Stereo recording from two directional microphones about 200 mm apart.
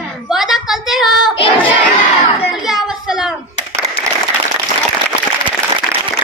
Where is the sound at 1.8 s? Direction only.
30° left (ahead or behind).